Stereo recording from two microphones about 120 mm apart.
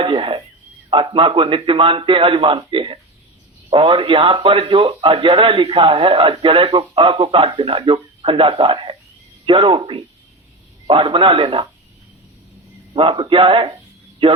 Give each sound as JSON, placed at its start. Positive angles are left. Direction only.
{"t": 0.0, "sound": "a sound", "side_deg": -45}
{"t": 0.9, "sound": "a man's voice", "side_deg": -50}
{"t": 12.9, "sound": "a man's voice", "side_deg": -50}